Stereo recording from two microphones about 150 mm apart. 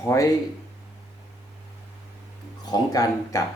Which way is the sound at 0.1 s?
20° left (ahead or behind).